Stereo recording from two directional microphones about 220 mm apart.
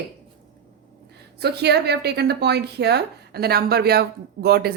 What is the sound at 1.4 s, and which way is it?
A woman's voice, 50° right (ahead or behind).